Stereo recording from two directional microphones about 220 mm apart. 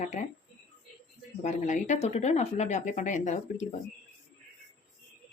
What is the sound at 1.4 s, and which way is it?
Speech, 30° left (ahead or behind).